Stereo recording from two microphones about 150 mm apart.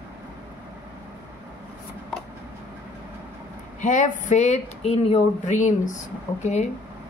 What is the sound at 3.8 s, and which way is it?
Speech, 55° left (ahead or behind).